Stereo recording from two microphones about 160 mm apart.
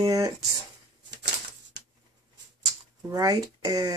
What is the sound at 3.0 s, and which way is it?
Speech, 25° right (ahead or behind).